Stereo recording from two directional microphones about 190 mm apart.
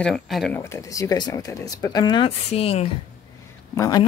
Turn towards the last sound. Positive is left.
turn(degrees=20)  # may be behind; listen again after turning